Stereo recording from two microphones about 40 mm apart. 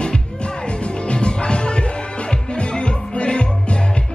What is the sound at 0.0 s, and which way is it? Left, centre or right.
Music, left.